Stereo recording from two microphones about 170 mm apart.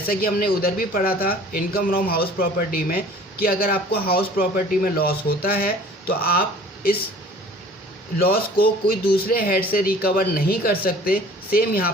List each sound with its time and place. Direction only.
0.1 s speech: 60° left (ahead or behind)
8.2 s speech: 60° left (ahead or behind)